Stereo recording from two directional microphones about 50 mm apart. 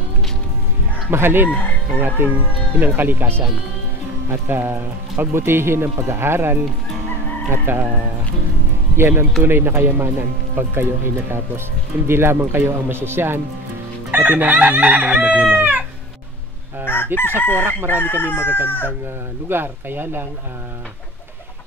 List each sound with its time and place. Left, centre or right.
1.1 s speech: right
2.0 s chicken: right
4.5 s speech: right
8.9 s speech: right
14.1 s chicken: right
16.8 s chicken: left
17.4 s speech: left
19.5 s speech: right